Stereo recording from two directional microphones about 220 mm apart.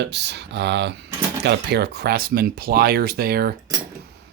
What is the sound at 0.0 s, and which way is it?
Speech, 50° right (ahead or behind).